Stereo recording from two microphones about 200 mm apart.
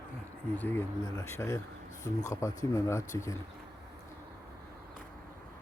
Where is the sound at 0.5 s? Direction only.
10° left (ahead or behind).